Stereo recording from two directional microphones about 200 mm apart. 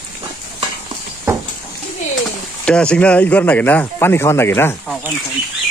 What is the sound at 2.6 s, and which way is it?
Speech, 5° left (ahead or behind).